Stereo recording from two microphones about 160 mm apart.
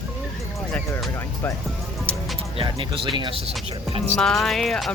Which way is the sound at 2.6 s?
30° right (ahead or behind).